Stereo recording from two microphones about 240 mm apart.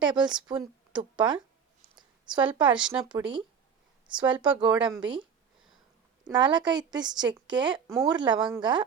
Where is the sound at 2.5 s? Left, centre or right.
Centre.